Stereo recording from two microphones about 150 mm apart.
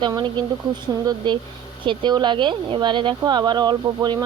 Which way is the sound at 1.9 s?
30° right (ahead or behind).